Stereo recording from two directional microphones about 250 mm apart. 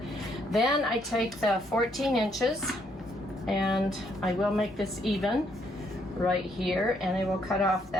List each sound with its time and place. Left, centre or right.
0.5 s a woman's voice: centre